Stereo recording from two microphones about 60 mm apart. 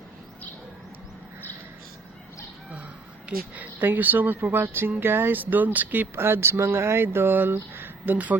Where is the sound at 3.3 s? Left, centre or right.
Right.